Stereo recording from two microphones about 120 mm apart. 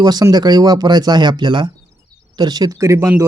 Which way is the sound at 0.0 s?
30° right (ahead or behind).